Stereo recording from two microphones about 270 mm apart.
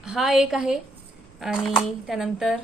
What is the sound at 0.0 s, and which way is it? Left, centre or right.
A woman's voice, centre.